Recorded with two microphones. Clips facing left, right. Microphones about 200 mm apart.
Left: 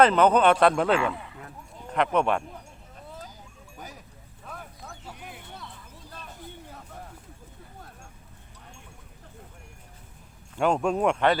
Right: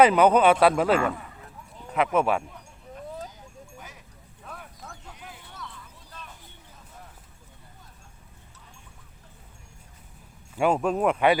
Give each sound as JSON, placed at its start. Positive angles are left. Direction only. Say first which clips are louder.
{"t": 0.0, "sound": "speech", "louder": "right 1 dB", "side_deg": -10}
{"t": 2.1, "sound": "speech", "louder": "right 1 dB", "side_deg": -5}
{"t": 4.4, "sound": "a sound", "louder": "left 1 dB", "side_deg": 0}
{"t": 10.5, "sound": "speech", "louder": "right 1 dB", "side_deg": -5}